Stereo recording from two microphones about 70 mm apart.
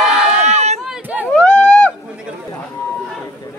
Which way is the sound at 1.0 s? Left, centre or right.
Right.